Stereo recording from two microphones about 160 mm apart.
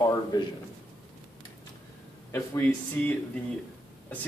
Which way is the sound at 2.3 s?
10° left (ahead or behind).